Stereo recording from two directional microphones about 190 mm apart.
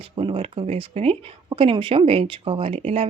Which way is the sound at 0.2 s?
30° right (ahead or behind).